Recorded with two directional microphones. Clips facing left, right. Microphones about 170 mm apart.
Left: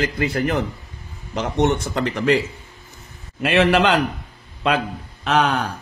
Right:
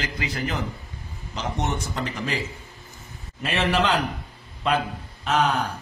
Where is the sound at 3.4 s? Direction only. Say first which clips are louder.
Left 7 dB; 70° left (ahead or behind).